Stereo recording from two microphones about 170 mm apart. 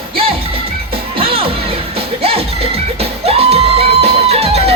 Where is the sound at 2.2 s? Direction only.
35° right (ahead or behind).